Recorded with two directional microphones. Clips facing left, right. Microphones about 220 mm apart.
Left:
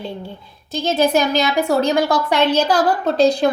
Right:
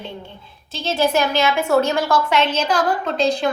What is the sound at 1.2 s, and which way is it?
A woman's voice, 40° left (ahead or behind).